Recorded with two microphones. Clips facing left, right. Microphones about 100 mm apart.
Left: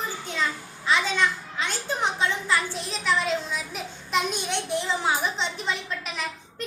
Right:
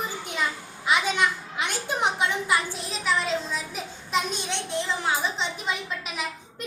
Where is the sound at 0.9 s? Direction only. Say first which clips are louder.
Even; 15° right (ahead or behind).